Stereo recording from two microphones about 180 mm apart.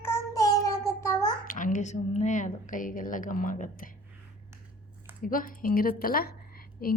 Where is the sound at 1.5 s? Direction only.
45° left (ahead or behind).